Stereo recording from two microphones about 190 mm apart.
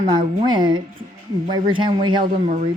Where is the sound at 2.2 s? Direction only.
45° right (ahead or behind).